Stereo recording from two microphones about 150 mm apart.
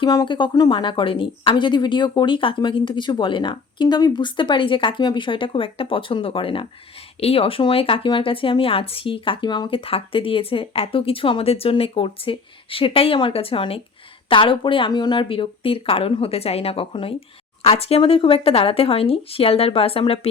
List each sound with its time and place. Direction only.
0.0 s speech: 30° left (ahead or behind)